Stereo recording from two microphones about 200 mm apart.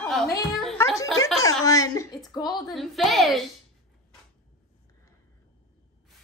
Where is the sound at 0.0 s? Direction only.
Centre (ahead or behind).